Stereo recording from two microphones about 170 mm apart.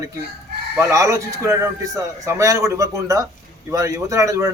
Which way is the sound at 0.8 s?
20° right (ahead or behind).